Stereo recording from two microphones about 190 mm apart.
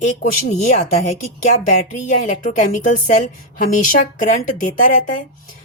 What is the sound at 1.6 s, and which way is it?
A woman's voice, 40° left (ahead or behind).